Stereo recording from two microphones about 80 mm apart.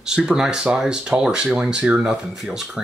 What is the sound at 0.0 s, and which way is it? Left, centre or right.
Speech, centre.